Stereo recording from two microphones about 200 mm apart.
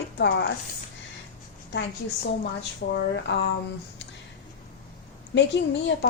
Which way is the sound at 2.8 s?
50° left (ahead or behind).